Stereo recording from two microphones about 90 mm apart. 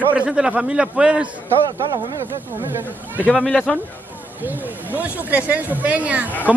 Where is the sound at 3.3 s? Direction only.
15° left (ahead or behind).